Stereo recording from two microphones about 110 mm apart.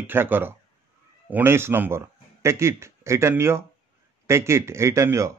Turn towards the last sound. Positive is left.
turn(degrees=-25)  # may be behind; listen again after turning